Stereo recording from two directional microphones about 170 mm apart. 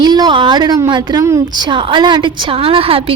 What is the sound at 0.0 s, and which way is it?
A woman's voice, 25° right (ahead or behind).